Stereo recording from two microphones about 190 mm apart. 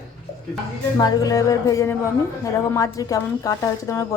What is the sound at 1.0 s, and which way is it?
A woman's voice, 20° left (ahead or behind).